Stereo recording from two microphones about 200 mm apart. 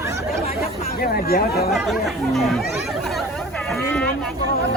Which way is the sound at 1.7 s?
Centre (ahead or behind).